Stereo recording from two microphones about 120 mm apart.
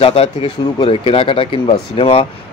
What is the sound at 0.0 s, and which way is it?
A man's voice, 55° left (ahead or behind).